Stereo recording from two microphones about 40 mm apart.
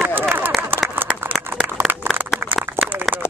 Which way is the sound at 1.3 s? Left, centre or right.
Right.